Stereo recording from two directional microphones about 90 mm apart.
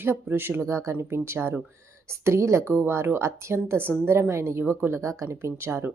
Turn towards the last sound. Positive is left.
turn(degrees=-25)  # may be behind; listen again after turning